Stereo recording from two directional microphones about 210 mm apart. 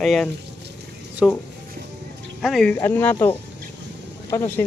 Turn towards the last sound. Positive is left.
turn(degrees=10)  # may be behind; listen again after turning